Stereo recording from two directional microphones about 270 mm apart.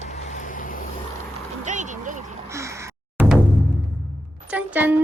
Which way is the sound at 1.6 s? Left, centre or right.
Right.